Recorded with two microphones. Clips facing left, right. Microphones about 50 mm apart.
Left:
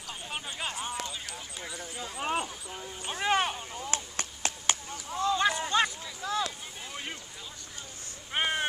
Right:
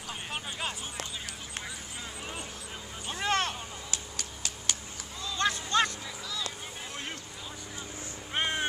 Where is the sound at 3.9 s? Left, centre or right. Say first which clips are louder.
Left 4 dB; left.